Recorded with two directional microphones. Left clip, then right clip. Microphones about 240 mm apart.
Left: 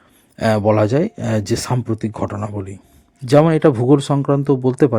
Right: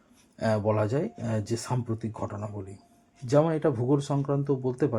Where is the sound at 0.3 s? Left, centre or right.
Left.